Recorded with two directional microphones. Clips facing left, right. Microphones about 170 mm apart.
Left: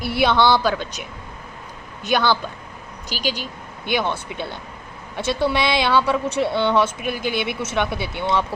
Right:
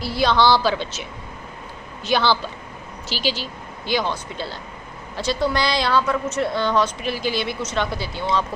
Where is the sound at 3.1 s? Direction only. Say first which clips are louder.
Right 1 dB; 45° left (ahead or behind).